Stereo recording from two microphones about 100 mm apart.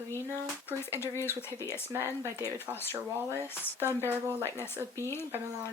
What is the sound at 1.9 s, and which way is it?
Speech, 25° right (ahead or behind).